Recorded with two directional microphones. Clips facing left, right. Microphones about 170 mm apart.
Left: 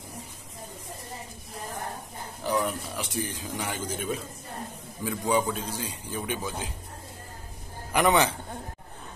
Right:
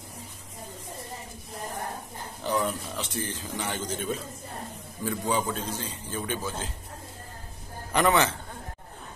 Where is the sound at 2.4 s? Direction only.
10° left (ahead or behind).